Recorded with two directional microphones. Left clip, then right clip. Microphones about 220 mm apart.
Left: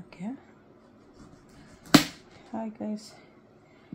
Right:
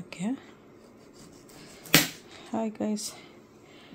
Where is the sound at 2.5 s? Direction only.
55° right (ahead or behind).